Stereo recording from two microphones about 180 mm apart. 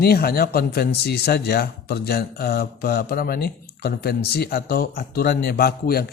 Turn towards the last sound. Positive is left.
turn(degrees=60)  # may be behind; listen again after turning